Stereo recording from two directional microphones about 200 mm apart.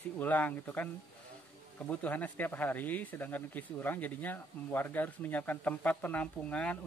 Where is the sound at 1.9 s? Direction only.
10° left (ahead or behind).